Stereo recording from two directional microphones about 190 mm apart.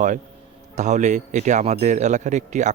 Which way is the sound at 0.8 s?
40° right (ahead or behind).